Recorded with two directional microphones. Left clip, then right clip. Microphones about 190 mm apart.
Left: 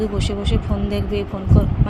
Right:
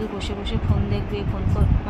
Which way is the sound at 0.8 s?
25° left (ahead or behind).